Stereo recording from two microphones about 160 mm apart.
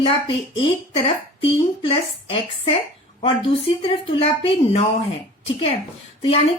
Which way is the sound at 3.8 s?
35° left (ahead or behind).